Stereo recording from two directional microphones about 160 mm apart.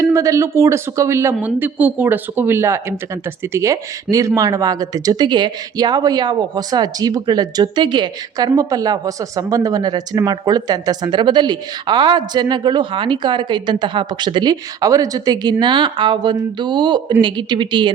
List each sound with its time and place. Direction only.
0.0 s speech: 20° right (ahead or behind)